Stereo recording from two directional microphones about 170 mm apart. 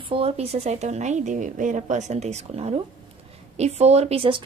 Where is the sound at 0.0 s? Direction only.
30° right (ahead or behind).